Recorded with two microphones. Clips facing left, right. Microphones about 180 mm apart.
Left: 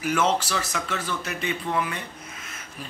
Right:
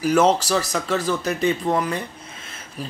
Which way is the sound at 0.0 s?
40° right (ahead or behind).